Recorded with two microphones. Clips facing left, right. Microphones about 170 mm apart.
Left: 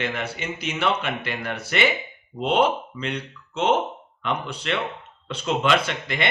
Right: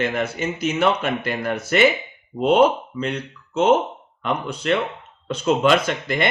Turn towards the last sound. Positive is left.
turn(degrees=-45)  # may be behind; listen again after turning